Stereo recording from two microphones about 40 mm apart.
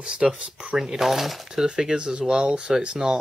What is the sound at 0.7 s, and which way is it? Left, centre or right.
Speech, centre.